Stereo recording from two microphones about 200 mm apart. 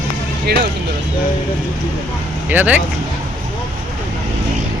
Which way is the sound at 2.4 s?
10° right (ahead or behind).